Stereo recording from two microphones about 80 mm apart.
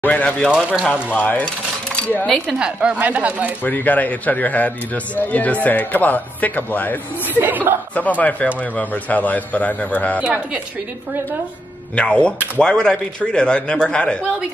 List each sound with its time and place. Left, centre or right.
0.0 s speech: centre
2.0 s a sound: centre
2.4 s speech: centre
3.6 s a man's voice: left
7.2 s speech: right
8.2 s a man's voice: centre
10.2 s a woman's voice: centre
11.9 s speech: centre